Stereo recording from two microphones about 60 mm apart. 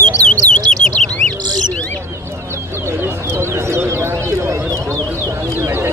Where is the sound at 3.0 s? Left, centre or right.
Right.